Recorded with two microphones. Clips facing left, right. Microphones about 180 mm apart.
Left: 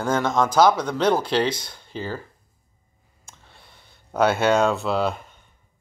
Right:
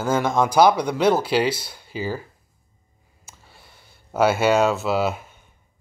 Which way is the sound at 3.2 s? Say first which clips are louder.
Right 1 dB; 5° right (ahead or behind).